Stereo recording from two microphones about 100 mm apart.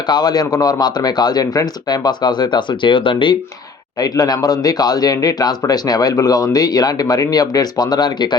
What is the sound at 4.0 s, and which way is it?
A man's voice, 40° left (ahead or behind).